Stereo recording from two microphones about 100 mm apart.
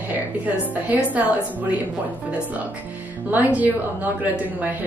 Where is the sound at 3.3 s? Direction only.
15° right (ahead or behind).